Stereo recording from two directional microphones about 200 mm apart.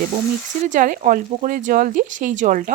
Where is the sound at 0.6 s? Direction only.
40° right (ahead or behind).